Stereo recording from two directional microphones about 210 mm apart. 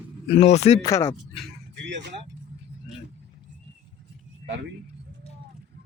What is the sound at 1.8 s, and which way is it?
Speech, 55° right (ahead or behind).